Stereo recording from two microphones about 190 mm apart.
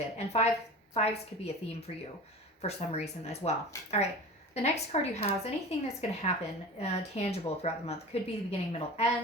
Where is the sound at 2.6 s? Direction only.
35° left (ahead or behind).